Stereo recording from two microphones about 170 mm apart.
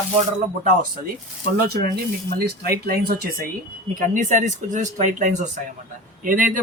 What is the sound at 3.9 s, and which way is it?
Speech, 45° right (ahead or behind).